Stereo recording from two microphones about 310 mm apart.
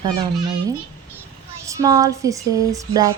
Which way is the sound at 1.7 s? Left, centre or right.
Centre.